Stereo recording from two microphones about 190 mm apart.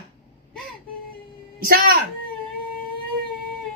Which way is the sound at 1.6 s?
50° right (ahead or behind).